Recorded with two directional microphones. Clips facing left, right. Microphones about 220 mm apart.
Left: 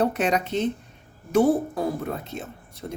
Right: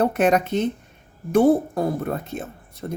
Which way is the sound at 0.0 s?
55° right (ahead or behind).